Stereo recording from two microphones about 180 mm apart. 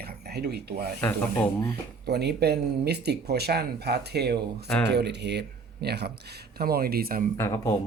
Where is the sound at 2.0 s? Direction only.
65° right (ahead or behind).